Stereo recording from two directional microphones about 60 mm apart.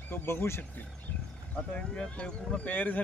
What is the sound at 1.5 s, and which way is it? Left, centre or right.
Speech, centre.